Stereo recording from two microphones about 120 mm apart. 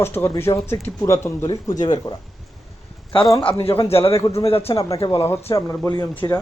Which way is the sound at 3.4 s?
50° left (ahead or behind).